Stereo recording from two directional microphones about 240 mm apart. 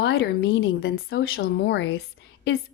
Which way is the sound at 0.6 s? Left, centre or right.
Left.